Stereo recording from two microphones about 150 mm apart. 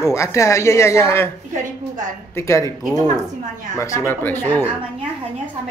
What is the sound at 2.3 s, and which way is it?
Speech, 20° left (ahead or behind).